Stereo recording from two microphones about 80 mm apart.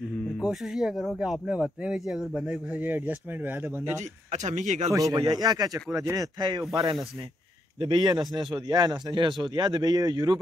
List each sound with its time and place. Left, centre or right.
0.4 s speech: centre
2.8 s speech: right
4.8 s speech: right
5.2 s speech: right
7.8 s a man's voice: right